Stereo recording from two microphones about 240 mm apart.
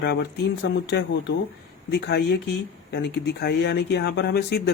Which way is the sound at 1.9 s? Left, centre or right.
Left.